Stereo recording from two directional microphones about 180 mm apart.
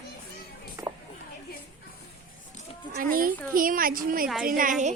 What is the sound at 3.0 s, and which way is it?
Speech, 50° right (ahead or behind).